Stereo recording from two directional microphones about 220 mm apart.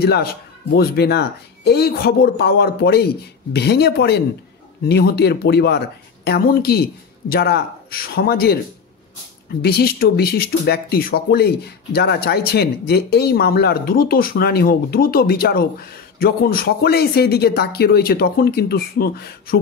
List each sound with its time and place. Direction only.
0.0 s speech: 45° left (ahead or behind)
9.6 s speech: 45° left (ahead or behind)